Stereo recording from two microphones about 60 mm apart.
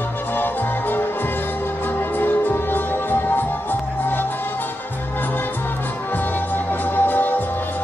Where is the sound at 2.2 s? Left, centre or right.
Left.